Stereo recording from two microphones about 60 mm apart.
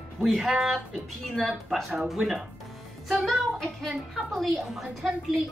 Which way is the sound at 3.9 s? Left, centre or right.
Centre.